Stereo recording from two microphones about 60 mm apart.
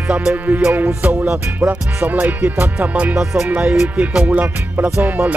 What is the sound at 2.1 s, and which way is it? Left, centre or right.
Music, right.